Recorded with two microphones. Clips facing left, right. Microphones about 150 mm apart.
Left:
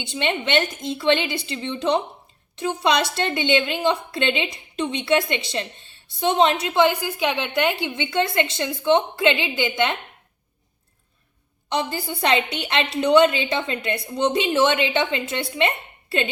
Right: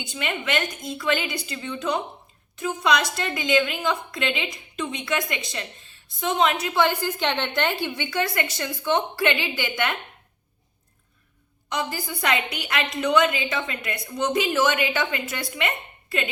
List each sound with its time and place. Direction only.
0.0 s a woman's voice: 30° left (ahead or behind)
11.7 s a woman's voice: 30° left (ahead or behind)